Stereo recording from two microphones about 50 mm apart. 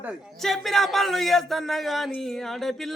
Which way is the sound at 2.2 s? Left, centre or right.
Centre.